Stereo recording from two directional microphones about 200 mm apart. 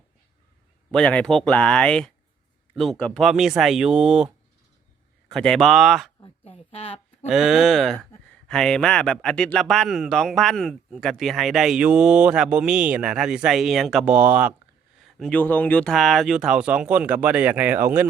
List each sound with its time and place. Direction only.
0.9 s speech: 5° left (ahead or behind)
5.3 s speech: centre (ahead or behind)
6.2 s speech: 30° left (ahead or behind)
7.3 s speech: centre (ahead or behind)